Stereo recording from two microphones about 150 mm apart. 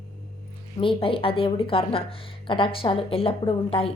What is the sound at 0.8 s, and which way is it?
A woman's voice, 35° left (ahead or behind).